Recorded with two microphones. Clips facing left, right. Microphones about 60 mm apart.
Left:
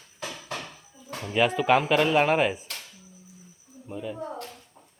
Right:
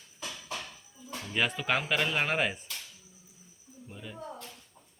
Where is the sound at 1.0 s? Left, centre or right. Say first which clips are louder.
Left 4 dB; left.